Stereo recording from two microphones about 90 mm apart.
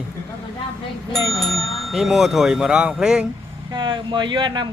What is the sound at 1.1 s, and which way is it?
Speech, centre (ahead or behind).